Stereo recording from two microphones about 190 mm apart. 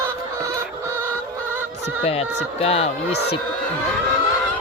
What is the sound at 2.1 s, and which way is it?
Speech, 30° left (ahead or behind).